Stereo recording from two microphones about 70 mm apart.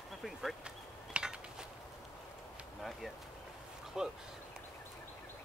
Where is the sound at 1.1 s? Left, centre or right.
Centre.